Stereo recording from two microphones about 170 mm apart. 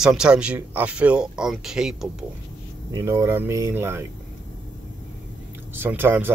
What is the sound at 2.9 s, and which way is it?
Speech, 20° right (ahead or behind).